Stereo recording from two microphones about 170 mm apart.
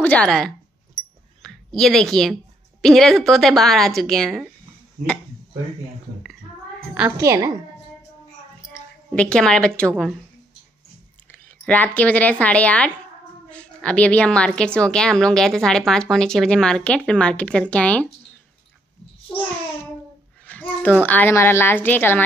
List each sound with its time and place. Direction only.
0.0 s a woman's voice: 5° left (ahead or behind)
7.2 s speech: 15° right (ahead or behind)
9.1 s a woman's voice: 5° left (ahead or behind)
11.3 s a woman's voice: 5° left (ahead or behind)
20.4 s a sound: 10° left (ahead or behind)
21.0 s a woman's voice: 10° left (ahead or behind)